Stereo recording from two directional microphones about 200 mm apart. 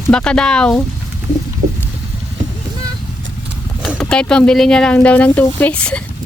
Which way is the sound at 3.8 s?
5° left (ahead or behind).